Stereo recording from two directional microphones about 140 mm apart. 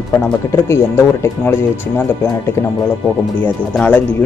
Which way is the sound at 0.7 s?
15° left (ahead or behind).